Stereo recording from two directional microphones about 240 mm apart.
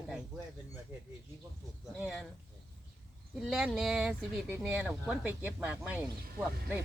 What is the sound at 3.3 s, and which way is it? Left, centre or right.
Speech, centre.